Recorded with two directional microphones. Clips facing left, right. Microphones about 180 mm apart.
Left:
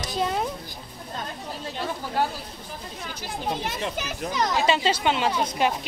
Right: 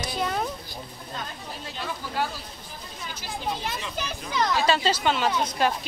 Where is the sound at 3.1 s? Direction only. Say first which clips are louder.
Left 2 dB; 60° left (ahead or behind).